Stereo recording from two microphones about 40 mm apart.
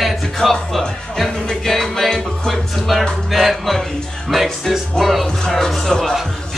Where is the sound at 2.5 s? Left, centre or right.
Centre.